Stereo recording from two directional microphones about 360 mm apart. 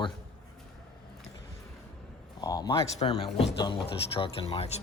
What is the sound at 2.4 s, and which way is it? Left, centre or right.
Speech, centre.